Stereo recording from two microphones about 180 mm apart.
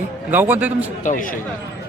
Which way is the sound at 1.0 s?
50° left (ahead or behind).